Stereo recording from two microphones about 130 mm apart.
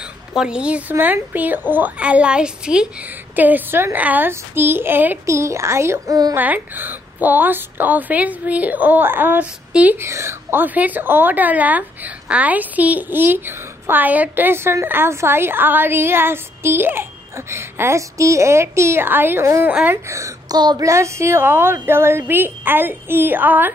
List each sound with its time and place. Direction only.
0.4 s a woman's voice: 5° right (ahead or behind); by 6.3 s 25° right (ahead or behind)
6.3 s a woman's voice: 15° right (ahead or behind)
20.1 s a woman's voice: 25° right (ahead or behind)